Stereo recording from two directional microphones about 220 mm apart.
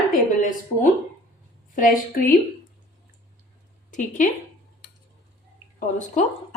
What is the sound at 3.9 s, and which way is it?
Speech, 35° left (ahead or behind).